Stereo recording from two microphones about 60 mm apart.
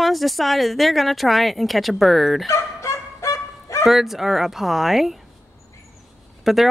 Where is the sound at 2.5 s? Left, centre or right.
Left.